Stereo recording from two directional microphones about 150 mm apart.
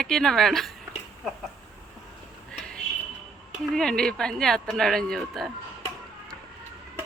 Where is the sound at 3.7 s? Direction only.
5° left (ahead or behind).